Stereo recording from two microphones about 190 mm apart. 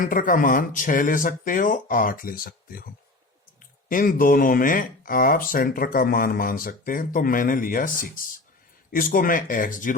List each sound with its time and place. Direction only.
0.0 s speech: 45° left (ahead or behind)
3.8 s speech: 45° left (ahead or behind)